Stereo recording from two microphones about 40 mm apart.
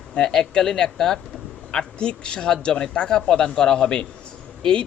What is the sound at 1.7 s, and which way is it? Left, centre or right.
A man's voice, left.